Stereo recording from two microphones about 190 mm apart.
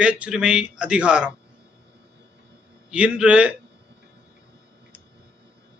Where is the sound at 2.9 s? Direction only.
5° right (ahead or behind).